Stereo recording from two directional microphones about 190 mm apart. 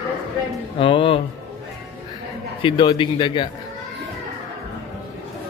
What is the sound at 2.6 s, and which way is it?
Speech, 25° left (ahead or behind).